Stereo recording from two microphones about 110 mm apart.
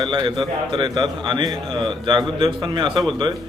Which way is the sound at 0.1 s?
45° right (ahead or behind).